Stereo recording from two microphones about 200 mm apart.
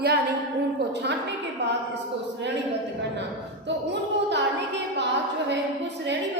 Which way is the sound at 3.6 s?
60° right (ahead or behind).